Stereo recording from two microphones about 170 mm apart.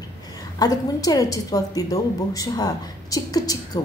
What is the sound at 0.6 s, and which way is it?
A woman's voice, 20° left (ahead or behind).